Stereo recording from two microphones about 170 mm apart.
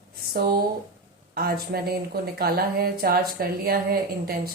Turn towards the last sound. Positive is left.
turn(degrees=-60)  # may be behind; listen again after turning